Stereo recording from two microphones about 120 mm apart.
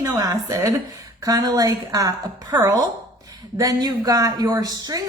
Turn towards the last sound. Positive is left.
turn(degrees=-35)  # may be behind; listen again after turning